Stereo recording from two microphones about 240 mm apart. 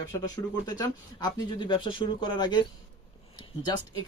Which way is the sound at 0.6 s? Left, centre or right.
Centre.